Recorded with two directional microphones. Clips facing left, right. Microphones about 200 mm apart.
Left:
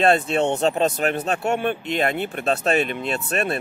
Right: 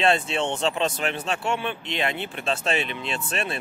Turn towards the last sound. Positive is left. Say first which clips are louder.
# left 5 dB
turn(degrees=55)  # may be behind; listen again after turning